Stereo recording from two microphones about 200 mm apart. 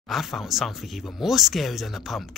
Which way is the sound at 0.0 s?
Centre (ahead or behind).